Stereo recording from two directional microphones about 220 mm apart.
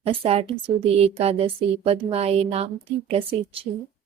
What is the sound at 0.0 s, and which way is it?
Speech, 25° right (ahead or behind).